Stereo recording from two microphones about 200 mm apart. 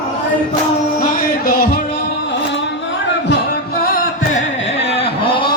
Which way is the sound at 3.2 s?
50° left (ahead or behind).